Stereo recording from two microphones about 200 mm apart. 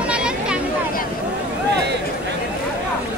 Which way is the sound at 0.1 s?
5° right (ahead or behind).